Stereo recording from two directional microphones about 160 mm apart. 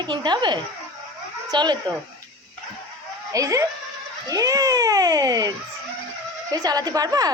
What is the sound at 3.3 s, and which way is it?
A woman's voice, 20° right (ahead or behind).